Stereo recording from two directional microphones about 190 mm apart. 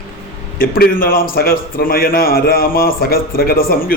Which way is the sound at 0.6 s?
50° left (ahead or behind).